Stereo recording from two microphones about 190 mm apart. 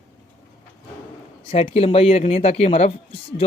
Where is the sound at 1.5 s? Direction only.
30° left (ahead or behind).